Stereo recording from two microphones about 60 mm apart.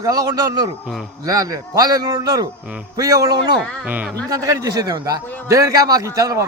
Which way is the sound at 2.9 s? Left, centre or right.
Right.